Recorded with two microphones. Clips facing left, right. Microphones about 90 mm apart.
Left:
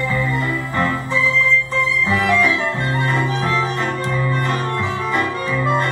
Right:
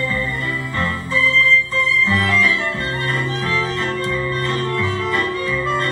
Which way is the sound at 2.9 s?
30° left (ahead or behind).